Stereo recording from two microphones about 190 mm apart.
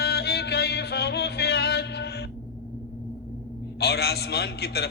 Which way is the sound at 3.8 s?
60° left (ahead or behind).